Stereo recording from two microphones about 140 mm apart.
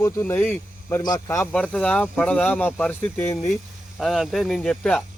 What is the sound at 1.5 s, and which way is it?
Speech, 5° left (ahead or behind).